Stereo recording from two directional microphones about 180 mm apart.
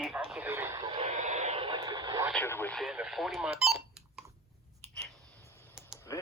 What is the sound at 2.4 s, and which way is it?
Speech, 15° left (ahead or behind).